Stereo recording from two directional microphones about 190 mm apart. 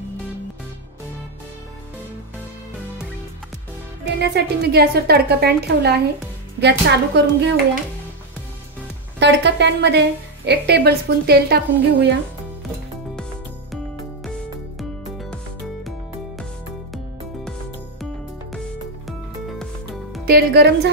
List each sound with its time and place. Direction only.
4.2 s a woman's voice: 60° right (ahead or behind)
9.2 s a woman's voice: 65° right (ahead or behind)
14.8 s music: centre (ahead or behind)
20.2 s a woman's voice: 55° right (ahead or behind)